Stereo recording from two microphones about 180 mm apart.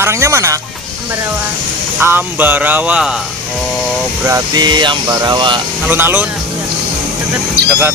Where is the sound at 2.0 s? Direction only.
10° right (ahead or behind).